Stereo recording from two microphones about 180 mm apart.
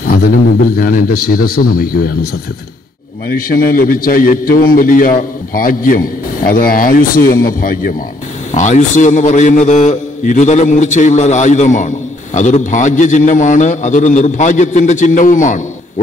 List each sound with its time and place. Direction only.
0.0 s a sound: 55° left (ahead or behind)
0.7 s a man's voice: 55° left (ahead or behind)
3.3 s a man's voice: 50° left (ahead or behind)
8.5 s a man's voice: 40° left (ahead or behind)